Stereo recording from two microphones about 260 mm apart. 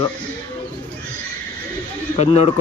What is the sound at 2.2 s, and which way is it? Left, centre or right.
Speech, left.